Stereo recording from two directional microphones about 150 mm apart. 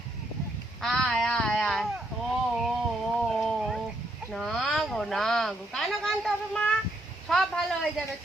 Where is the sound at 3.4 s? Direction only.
Centre (ahead or behind).